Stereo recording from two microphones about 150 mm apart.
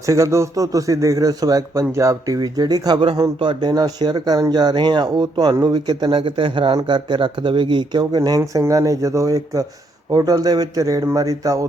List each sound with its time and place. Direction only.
0.0 s speech: 20° right (ahead or behind)